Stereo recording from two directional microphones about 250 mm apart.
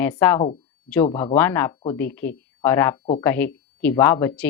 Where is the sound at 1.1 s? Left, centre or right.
Centre.